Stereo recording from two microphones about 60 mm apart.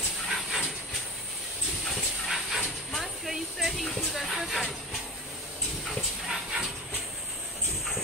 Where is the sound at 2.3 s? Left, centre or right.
Centre.